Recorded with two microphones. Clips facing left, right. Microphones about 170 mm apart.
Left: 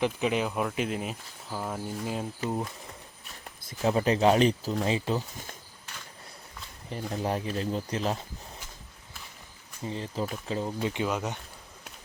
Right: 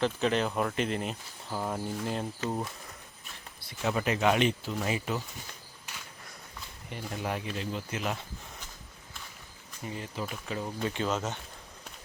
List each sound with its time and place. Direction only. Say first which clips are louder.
0.0 s speech: left 1 dB; 10° left (ahead or behind)
3.6 s speech: left 5 dB; 40° left (ahead or behind)
6.9 s speech: left 4 dB; 35° left (ahead or behind)
9.8 s speech: left 4 dB; 30° left (ahead or behind)
10.8 s speech: right 1 dB; 15° left (ahead or behind)